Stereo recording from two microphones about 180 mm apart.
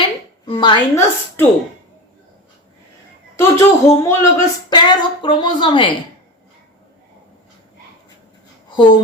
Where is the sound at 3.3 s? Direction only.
15° left (ahead or behind).